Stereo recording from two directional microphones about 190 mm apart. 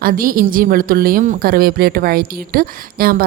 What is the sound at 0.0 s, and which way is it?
A woman's voice, 50° right (ahead or behind).